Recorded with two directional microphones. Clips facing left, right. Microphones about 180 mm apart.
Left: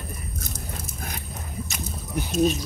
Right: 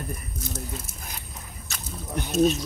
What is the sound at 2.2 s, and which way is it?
Speech, centre (ahead or behind).